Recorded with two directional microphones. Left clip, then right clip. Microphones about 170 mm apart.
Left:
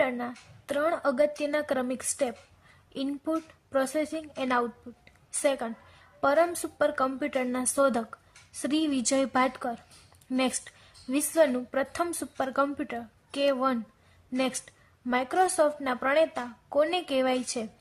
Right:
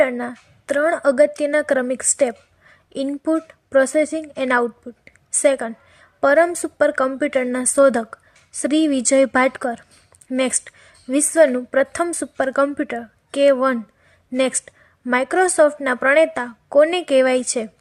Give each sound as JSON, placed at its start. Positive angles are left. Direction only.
{"t": 0.0, "sound": "a woman's voice", "side_deg": -25}
{"t": 5.0, "sound": "a sound", "side_deg": -25}
{"t": 6.1, "sound": "a woman's voice", "side_deg": -25}